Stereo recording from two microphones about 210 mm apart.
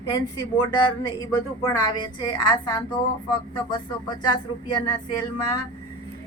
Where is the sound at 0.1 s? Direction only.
20° left (ahead or behind).